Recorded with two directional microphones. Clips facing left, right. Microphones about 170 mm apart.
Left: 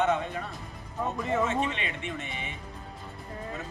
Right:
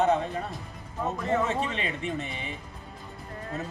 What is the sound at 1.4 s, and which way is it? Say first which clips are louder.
Speech: even; 35° right (ahead or behind).